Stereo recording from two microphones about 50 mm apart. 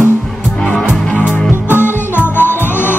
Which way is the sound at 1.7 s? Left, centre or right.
Left.